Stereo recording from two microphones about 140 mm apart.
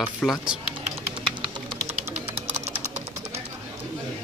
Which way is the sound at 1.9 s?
50° right (ahead or behind).